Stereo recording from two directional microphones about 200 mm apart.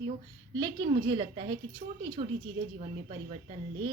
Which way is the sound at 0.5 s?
20° right (ahead or behind).